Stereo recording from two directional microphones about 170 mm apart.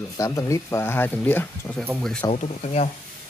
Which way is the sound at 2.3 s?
45° left (ahead or behind).